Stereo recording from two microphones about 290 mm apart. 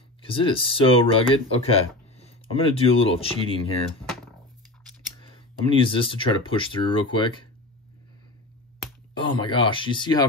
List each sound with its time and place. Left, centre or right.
0.2 s speech: centre
5.7 s speech: centre
9.1 s speech: centre